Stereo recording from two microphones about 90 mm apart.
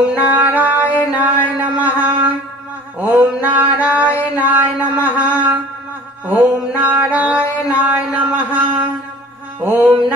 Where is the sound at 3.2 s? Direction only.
20° right (ahead or behind).